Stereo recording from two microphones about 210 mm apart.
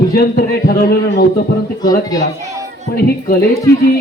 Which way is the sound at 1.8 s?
20° left (ahead or behind).